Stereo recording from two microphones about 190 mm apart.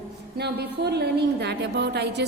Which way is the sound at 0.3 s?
60° right (ahead or behind).